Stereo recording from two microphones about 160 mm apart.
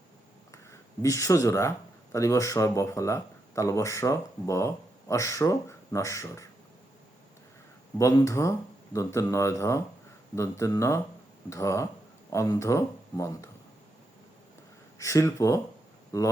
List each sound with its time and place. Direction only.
0.5 s speech: 20° left (ahead or behind)
7.9 s speech: 20° left (ahead or behind)
14.9 s speech: 20° left (ahead or behind)